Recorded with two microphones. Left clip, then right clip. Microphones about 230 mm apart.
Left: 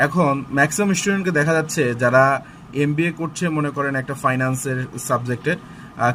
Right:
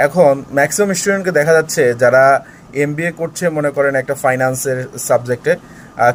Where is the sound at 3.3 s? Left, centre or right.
Centre.